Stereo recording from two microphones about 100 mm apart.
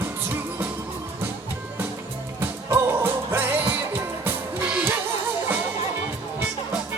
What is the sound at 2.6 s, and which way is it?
Music, 20° right (ahead or behind).